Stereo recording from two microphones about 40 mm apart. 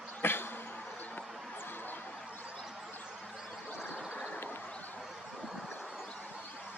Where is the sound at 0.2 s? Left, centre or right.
Left.